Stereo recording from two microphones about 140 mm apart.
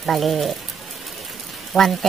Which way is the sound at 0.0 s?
Centre (ahead or behind).